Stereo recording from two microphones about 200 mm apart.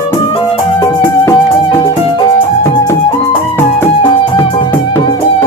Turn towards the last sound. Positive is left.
turn(degrees=15)  # may be behind; listen again after turning